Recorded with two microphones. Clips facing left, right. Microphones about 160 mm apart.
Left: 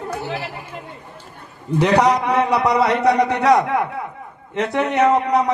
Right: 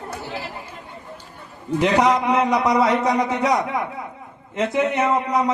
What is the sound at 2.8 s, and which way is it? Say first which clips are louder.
A man's voice: left 3 dB; 70° left (ahead or behind).